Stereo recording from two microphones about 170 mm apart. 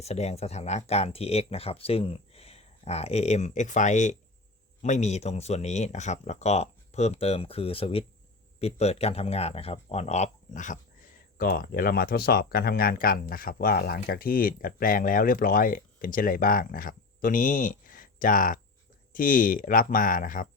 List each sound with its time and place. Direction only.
0.0 s speech: 40° left (ahead or behind)